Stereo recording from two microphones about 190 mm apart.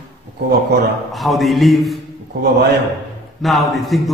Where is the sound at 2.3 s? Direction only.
60° right (ahead or behind).